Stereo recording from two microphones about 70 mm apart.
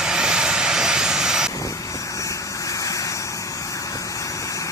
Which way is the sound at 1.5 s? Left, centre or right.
Left.